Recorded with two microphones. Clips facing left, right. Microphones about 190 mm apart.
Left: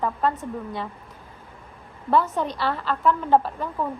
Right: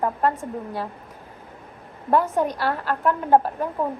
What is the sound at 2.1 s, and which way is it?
A woman's voice, 10° right (ahead or behind).